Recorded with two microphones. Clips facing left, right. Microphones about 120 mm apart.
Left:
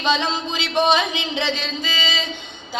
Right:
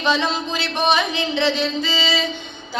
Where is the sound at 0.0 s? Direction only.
20° left (ahead or behind).